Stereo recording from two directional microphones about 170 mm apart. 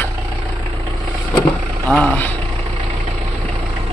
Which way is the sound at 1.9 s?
5° left (ahead or behind).